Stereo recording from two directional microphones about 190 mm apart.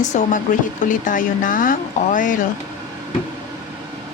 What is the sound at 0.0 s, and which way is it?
Speech, 40° left (ahead or behind).